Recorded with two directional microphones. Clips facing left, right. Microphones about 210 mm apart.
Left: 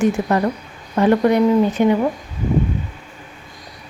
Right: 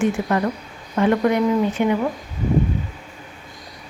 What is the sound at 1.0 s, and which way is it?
Speech, 35° left (ahead or behind).